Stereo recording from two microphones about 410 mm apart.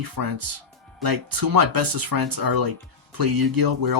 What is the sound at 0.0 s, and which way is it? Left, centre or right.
Speech, right.